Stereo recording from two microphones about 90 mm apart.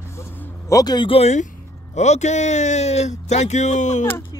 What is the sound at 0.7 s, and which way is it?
Speech, 40° left (ahead or behind).